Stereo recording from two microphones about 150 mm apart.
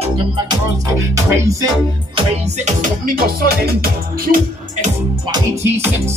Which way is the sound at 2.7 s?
65° right (ahead or behind).